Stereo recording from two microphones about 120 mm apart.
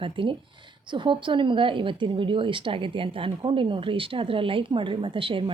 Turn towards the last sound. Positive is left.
turn(degrees=-45)  # may be behind; listen again after turning